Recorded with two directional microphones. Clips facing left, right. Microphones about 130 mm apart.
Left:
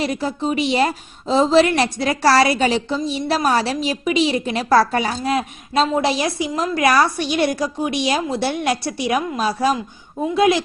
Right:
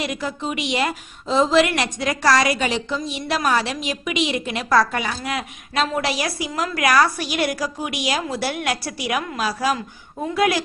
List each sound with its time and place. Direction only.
0.0 s a woman's voice: 30° left (ahead or behind)